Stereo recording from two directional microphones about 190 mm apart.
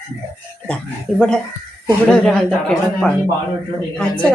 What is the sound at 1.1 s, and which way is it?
Speech, 5° left (ahead or behind).